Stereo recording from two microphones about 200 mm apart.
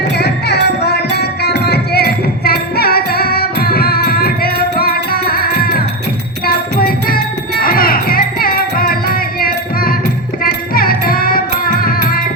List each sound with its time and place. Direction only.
0.2 s music: 55° left (ahead or behind)